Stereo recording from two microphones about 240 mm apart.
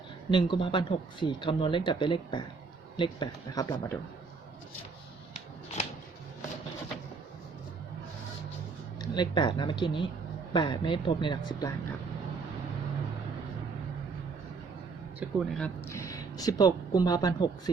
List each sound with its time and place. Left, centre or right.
0.3 s speech: centre
9.0 s speech: centre
15.2 s speech: centre